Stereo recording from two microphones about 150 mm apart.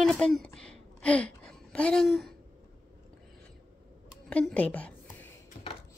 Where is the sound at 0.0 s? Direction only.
5° left (ahead or behind).